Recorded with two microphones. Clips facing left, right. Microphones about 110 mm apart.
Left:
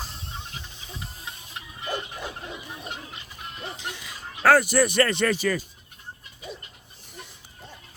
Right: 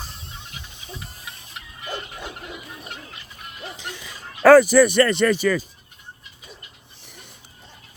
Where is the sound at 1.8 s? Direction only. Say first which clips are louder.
Left 1 dB; 20° left (ahead or behind).